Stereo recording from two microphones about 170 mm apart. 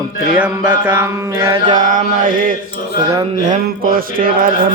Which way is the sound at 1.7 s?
50° right (ahead or behind).